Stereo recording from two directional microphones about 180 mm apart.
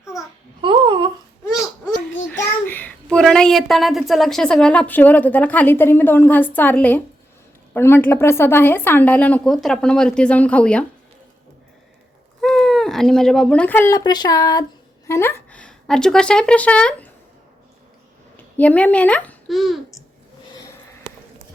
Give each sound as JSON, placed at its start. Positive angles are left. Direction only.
{"t": 0.0, "sound": "babbling", "side_deg": 20}
{"t": 0.6, "sound": "a sound", "side_deg": -25}
{"t": 2.6, "sound": "a woman's voice", "side_deg": 10}
{"t": 12.4, "sound": "a woman's voice", "side_deg": 5}
{"t": 18.3, "sound": "a child's voice", "side_deg": 10}